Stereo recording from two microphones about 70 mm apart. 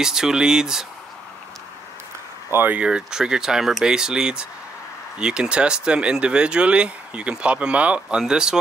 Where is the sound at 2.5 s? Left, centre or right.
Right.